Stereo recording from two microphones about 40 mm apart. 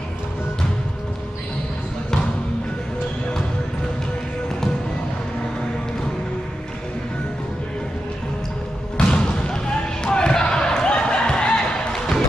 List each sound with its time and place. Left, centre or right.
8.9 s basketball bounce: left